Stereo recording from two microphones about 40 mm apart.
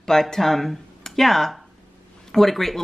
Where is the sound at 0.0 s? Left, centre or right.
Centre.